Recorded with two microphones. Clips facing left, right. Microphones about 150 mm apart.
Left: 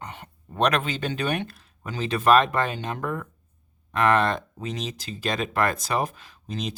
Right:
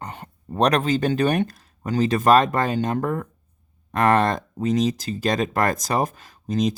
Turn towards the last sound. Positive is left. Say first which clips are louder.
# right 10 dB
turn(degrees=-40)  # may be behind; listen again after turning